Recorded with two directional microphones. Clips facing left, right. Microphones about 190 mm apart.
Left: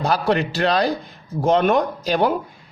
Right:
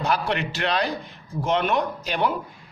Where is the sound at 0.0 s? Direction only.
35° left (ahead or behind).